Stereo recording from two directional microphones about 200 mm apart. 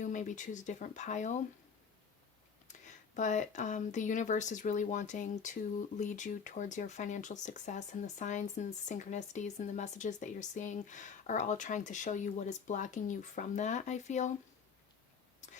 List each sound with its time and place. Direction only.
0.0 s speech: 40° left (ahead or behind)
2.6 s speech: 40° left (ahead or behind)
15.4 s whispering: 35° left (ahead or behind)